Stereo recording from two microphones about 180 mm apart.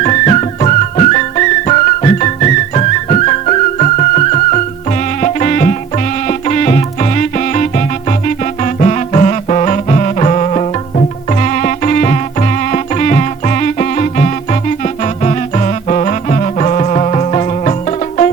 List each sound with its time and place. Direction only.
0.0 s music: 40° left (ahead or behind)